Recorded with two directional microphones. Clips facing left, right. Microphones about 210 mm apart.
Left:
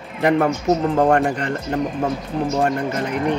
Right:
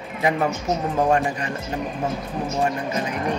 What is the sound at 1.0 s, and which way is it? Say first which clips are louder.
Speech: left 4 dB; 60° left (ahead or behind).